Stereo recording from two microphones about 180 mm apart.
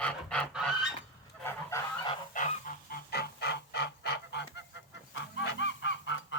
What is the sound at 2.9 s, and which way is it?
Goose, 65° left (ahead or behind).